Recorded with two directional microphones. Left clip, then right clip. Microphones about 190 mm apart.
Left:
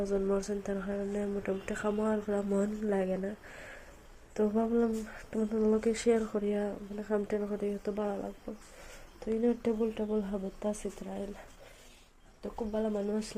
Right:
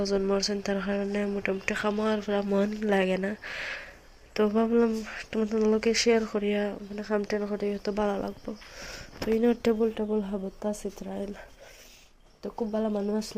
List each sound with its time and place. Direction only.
0.6 s speech: 10° right (ahead or behind)
5.8 s speech: centre (ahead or behind)
7.9 s speech: 20° right (ahead or behind)
12.4 s speech: 30° right (ahead or behind)